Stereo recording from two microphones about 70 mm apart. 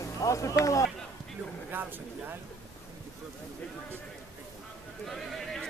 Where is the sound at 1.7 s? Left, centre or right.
Right.